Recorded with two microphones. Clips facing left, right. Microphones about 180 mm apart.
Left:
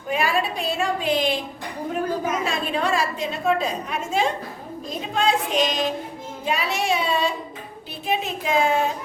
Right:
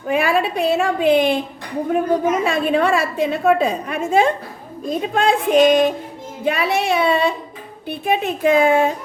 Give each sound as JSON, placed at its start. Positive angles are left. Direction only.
{"t": 0.1, "sound": "a woman's voice", "side_deg": -60}
{"t": 2.4, "sound": "a woman's voice", "side_deg": -60}